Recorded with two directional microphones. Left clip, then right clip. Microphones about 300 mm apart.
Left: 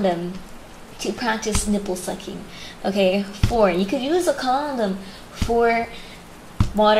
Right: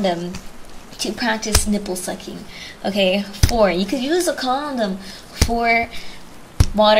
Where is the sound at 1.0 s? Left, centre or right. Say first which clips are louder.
Right 2 dB; centre.